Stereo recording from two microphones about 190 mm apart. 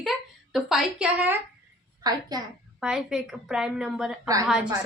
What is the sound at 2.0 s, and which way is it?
Speech, 20° right (ahead or behind).